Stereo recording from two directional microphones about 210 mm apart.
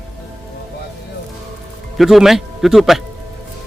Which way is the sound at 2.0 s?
Centre (ahead or behind).